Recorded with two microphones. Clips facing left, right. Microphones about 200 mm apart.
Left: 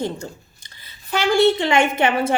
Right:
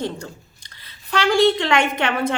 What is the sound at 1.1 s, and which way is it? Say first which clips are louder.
Speech: even; 5° left (ahead or behind).